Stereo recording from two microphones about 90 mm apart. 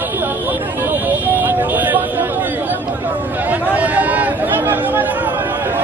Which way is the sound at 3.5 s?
15° right (ahead or behind).